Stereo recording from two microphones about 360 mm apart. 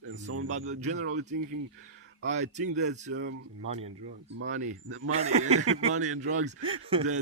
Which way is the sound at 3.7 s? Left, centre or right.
Centre.